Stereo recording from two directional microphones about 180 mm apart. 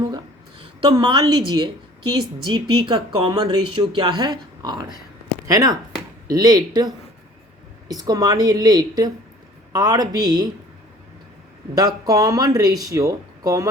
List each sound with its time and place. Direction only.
0.6 s a woman's voice: 25° right (ahead or behind)
11.7 s speech: 20° right (ahead or behind)